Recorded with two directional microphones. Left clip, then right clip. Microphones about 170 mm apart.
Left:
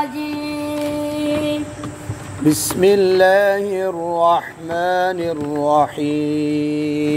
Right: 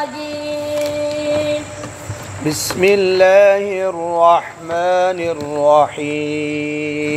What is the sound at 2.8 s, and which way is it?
Mantra, 30° left (ahead or behind).